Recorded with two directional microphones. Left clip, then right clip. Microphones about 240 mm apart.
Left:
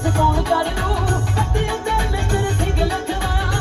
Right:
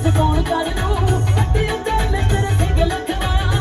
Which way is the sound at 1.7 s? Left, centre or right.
Left.